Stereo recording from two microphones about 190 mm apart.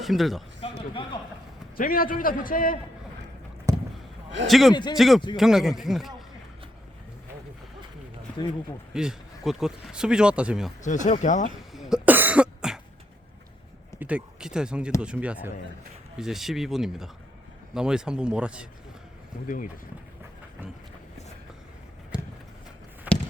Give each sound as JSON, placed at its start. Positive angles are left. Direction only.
{"t": 0.0, "sound": "speech", "side_deg": 0}
{"t": 0.6, "sound": "a sound", "side_deg": 25}
{"t": 1.7, "sound": "a man's voice", "side_deg": 50}
{"t": 3.7, "sound": "vehicle", "side_deg": -15}
{"t": 4.4, "sound": "speech", "side_deg": 0}
{"t": 4.7, "sound": "a man's voice", "side_deg": 25}
{"t": 4.9, "sound": "speech", "side_deg": 0}
{"t": 8.9, "sound": "speech", "side_deg": -5}
{"t": 10.8, "sound": "speech", "side_deg": 40}
{"t": 11.7, "sound": "cough", "side_deg": 0}
{"t": 14.0, "sound": "speech", "side_deg": -5}
{"t": 22.1, "sound": "clip-clop", "side_deg": -5}
{"t": 23.1, "sound": "a sound", "side_deg": -10}